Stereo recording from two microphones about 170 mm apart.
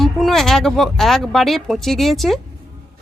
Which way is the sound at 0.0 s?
Centre (ahead or behind).